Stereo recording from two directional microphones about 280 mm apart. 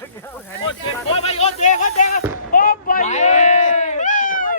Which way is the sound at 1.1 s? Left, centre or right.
Left.